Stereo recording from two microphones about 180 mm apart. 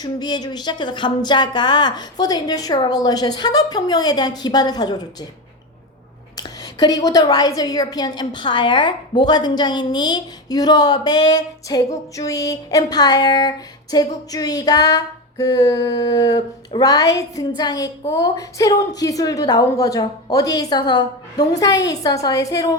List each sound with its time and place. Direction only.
0.0 s a woman's voice: 25° left (ahead or behind)
6.3 s a woman's voice: 20° left (ahead or behind)